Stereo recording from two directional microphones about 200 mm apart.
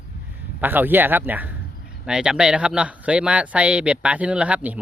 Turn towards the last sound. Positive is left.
turn(degrees=-5)  # may be behind; listen again after turning